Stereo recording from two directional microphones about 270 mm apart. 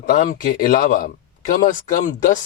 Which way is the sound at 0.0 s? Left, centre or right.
Left.